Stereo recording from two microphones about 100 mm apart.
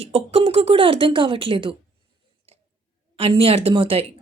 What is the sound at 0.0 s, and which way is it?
A woman's voice, 80° right.